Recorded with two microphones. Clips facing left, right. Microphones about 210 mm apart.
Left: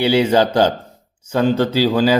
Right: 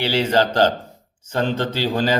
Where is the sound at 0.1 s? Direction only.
10° left (ahead or behind).